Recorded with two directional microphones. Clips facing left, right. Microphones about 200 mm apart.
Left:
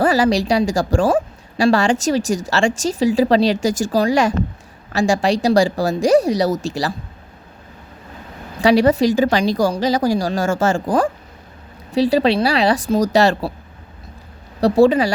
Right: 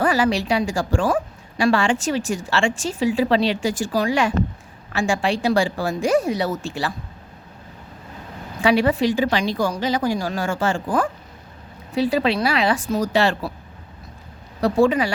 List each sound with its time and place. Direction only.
0.0 s speech: 35° left (ahead or behind)
8.6 s speech: 40° left (ahead or behind)
14.6 s speech: 35° left (ahead or behind)